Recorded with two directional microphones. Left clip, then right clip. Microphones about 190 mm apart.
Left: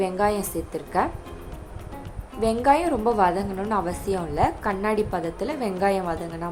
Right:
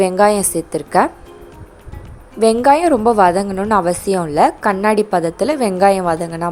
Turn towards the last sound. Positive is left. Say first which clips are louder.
# right 10 dB
turn(degrees=-50)  # may be behind; listen again after turning